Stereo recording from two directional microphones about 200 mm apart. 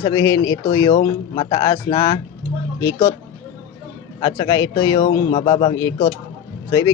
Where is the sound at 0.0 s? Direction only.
15° left (ahead or behind).